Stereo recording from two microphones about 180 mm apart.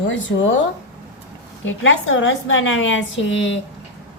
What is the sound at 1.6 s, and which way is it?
A woman's voice, 90° left.